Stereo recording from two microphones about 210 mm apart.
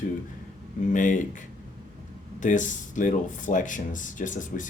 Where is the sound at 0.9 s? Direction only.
40° left (ahead or behind).